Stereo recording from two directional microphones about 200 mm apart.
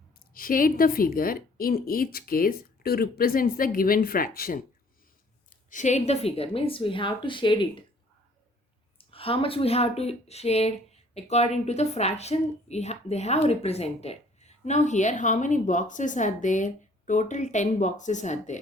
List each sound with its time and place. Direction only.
0.3 s a woman's voice: 45° left (ahead or behind); by 7.9 s 25° left (ahead or behind)
9.0 s a woman's voice: 30° left (ahead or behind)